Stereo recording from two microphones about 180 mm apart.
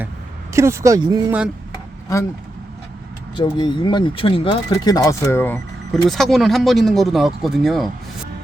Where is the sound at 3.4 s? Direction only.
25° left (ahead or behind).